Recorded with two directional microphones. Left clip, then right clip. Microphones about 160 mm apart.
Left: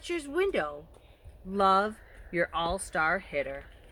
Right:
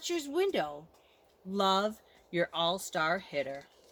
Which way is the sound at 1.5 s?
20° right (ahead or behind).